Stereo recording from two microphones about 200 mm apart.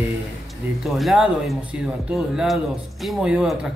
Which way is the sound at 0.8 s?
Centre (ahead or behind).